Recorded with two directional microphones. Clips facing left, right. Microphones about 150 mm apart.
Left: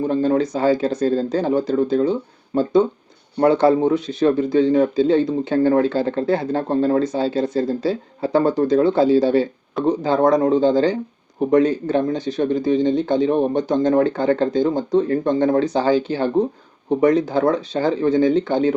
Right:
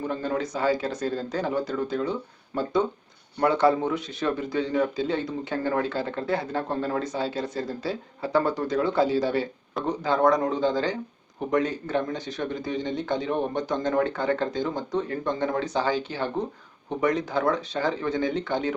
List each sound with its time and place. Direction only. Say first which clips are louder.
0.0 s speech: left 10 dB; 30° left (ahead or behind)